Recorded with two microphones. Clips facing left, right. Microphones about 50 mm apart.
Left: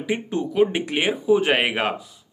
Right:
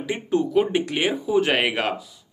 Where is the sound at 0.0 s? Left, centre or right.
Centre.